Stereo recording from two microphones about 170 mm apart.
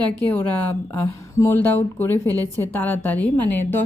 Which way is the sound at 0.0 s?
10° left (ahead or behind).